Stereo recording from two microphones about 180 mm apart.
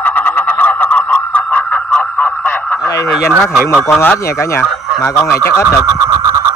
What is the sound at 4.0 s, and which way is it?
Speech, 10° left (ahead or behind).